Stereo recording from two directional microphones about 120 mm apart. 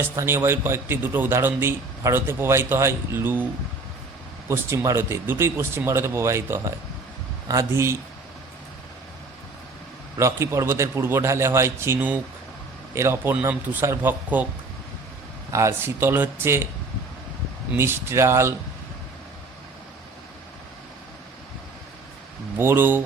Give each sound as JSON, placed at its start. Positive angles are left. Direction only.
{"t": 0.0, "sound": "a man's voice", "side_deg": -20}
{"t": 4.4, "sound": "a man's voice", "side_deg": -25}
{"t": 10.2, "sound": "a man's voice", "side_deg": -25}
{"t": 15.5, "sound": "a man's voice", "side_deg": -20}
{"t": 17.7, "sound": "a man's voice", "side_deg": -20}
{"t": 22.5, "sound": "a man's voice", "side_deg": -20}